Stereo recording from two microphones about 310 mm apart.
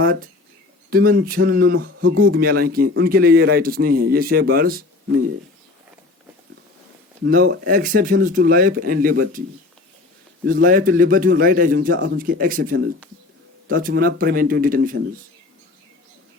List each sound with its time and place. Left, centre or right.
0.0 s speech: right
7.3 s speech: right
10.4 s speech: right